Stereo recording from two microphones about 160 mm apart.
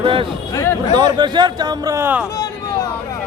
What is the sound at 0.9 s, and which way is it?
Speech, 25° right (ahead or behind).